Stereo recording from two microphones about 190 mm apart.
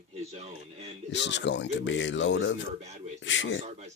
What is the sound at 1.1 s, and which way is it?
A man's voice, 65° left (ahead or behind).